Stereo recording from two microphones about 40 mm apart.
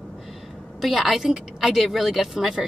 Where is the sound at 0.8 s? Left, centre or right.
Centre.